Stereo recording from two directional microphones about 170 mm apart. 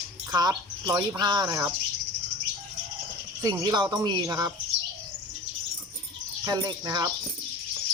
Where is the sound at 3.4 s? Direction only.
20° right (ahead or behind).